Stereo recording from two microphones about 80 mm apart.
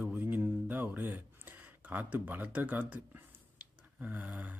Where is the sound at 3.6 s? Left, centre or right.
Centre.